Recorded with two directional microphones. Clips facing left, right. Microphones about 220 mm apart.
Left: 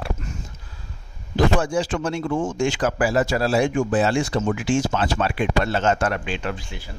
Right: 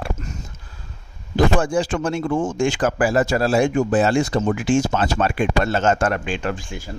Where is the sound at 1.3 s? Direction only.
50° right (ahead or behind).